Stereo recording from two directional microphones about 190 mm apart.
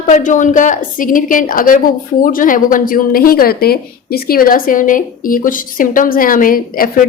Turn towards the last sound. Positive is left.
turn(degrees=50)  # may be behind; listen again after turning